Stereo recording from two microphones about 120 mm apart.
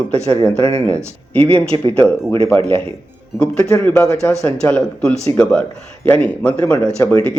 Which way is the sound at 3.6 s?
25° left (ahead or behind).